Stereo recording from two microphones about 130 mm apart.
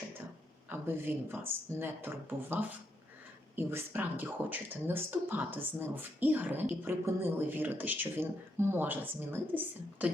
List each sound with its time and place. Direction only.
0.7 s speech: 15° right (ahead or behind)